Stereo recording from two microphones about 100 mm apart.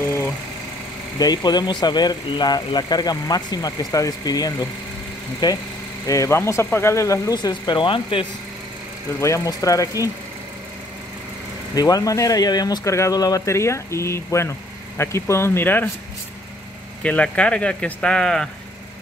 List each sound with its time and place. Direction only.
1.1 s speech: 40° left (ahead or behind)
7.3 s speech: 45° left (ahead or behind)
9.2 s speech: 30° left (ahead or behind)
11.7 s speech: 40° left (ahead or behind); by 15.9 s 20° left (ahead or behind)
17.0 s speech: 10° left (ahead or behind)